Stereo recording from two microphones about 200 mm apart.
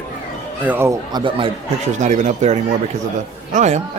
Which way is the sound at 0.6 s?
10° right (ahead or behind).